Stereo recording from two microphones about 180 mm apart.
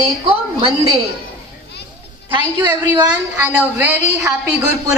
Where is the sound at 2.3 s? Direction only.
25° right (ahead or behind).